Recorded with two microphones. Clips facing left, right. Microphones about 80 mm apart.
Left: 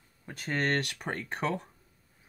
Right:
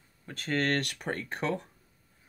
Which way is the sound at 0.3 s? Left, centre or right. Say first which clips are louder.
Right 1 dB; centre.